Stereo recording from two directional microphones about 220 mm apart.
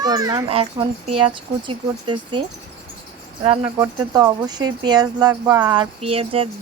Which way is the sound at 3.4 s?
25° right (ahead or behind).